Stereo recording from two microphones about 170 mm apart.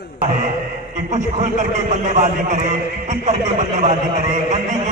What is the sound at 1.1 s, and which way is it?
A man's voice, 45° right (ahead or behind).